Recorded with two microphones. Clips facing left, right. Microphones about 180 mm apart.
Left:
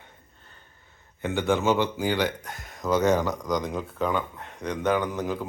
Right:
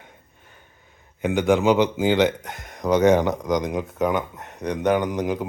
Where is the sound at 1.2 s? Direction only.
15° right (ahead or behind).